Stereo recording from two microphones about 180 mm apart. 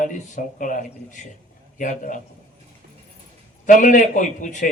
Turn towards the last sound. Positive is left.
turn(degrees=45)  # may be behind; listen again after turning